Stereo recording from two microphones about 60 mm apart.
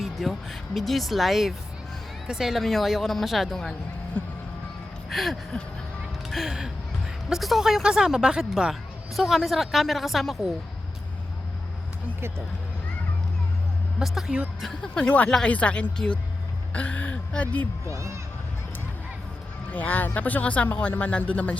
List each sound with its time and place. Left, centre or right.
0.0 s speech: centre
5.0 s speech: centre
14.0 s speech: centre
14.8 s a woman's voice: centre
19.7 s a woman's voice: left